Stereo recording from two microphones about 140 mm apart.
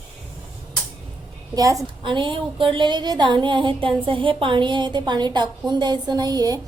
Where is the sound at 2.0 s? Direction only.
35° right (ahead or behind).